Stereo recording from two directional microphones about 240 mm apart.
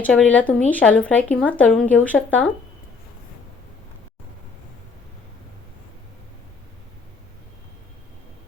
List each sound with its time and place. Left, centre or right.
0.0 s speech: centre